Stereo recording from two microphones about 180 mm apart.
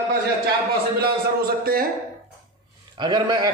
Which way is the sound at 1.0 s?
55° right (ahead or behind).